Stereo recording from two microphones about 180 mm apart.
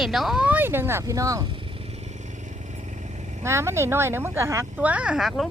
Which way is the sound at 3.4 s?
15° right (ahead or behind).